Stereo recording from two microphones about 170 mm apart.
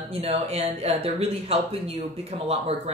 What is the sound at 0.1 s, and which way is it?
Speech, 35° right (ahead or behind).